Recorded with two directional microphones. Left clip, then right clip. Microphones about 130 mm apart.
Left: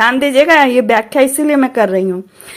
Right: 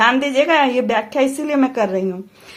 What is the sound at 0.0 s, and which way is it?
A woman's voice, 30° left (ahead or behind).